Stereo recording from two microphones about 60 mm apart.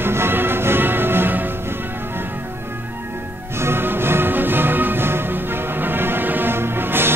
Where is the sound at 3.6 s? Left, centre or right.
Right.